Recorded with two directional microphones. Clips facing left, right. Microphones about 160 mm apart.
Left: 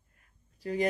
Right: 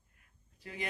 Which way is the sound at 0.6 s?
40° left (ahead or behind).